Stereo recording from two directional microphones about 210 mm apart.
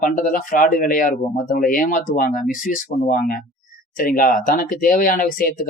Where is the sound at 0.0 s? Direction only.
40° left (ahead or behind).